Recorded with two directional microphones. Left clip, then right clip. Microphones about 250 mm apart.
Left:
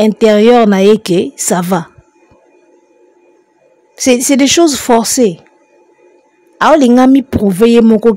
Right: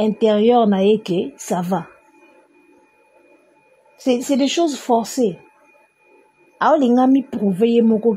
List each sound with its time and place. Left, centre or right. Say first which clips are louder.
0.0 s speech: left 8 dB; left
3.9 s speech: left 9 dB; left
6.6 s speech: left 8 dB; left